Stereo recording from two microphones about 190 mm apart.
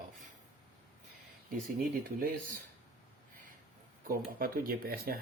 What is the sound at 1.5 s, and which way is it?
Speech, 50° right (ahead or behind).